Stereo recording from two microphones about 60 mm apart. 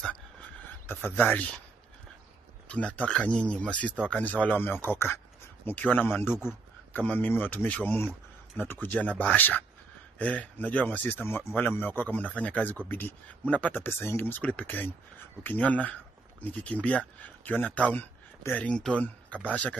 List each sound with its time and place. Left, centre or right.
0.8 s speech: left
2.7 s a man's voice: left
5.8 s a man's voice: left
7.0 s a man's voice: left
14.4 s speech: left